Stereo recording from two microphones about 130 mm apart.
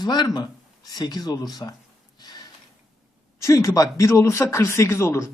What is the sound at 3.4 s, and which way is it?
A man's voice, 25° left (ahead or behind).